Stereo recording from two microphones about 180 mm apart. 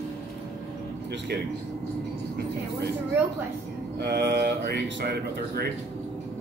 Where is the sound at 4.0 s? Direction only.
65° right (ahead or behind).